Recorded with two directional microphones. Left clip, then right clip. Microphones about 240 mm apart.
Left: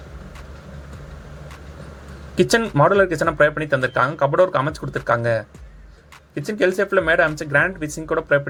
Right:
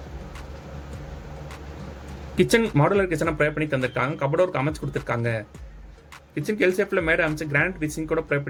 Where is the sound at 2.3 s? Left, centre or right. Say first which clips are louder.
Left 4 dB; centre.